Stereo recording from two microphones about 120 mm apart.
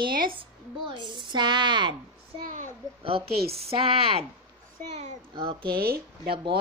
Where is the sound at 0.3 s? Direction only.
45° right (ahead or behind).